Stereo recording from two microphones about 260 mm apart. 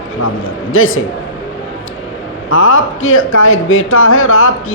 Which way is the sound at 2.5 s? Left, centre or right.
Left.